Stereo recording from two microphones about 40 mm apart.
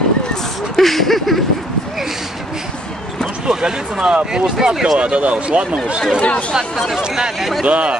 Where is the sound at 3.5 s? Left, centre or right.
Centre.